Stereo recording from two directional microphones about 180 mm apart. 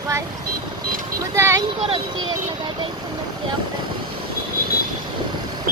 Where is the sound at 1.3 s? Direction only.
15° right (ahead or behind).